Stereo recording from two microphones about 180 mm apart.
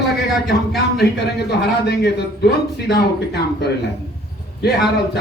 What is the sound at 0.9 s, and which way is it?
A man's voice, 65° left (ahead or behind).